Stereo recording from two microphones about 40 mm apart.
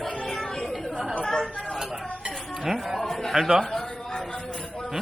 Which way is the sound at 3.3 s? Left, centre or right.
Centre.